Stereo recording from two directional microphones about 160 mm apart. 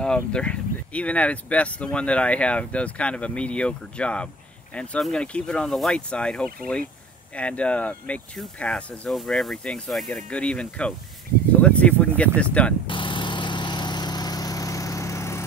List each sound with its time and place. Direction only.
0.0 s speech: 5° left (ahead or behind)
12.8 s vehicle: 30° left (ahead or behind)